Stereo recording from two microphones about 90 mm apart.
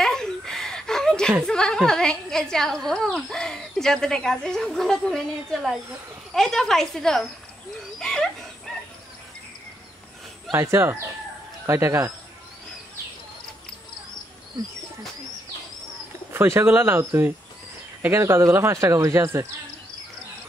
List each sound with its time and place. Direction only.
0.0 s a sound: 5° left (ahead or behind)
1.4 s speech: 10° left (ahead or behind)
8.0 s dog: 5° left (ahead or behind)
10.5 s speech: 30° right (ahead or behind)
16.3 s speech: 25° right (ahead or behind)